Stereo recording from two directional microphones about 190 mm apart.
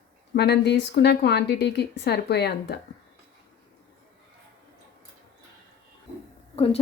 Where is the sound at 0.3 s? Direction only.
60° left (ahead or behind).